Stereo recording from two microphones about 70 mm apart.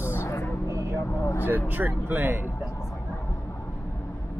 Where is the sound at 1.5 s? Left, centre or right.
Right.